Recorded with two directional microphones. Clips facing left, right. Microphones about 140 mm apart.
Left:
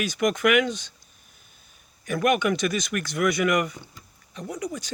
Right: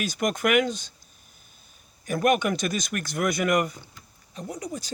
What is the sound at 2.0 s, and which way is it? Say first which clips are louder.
Speech: even; 35° right (ahead or behind).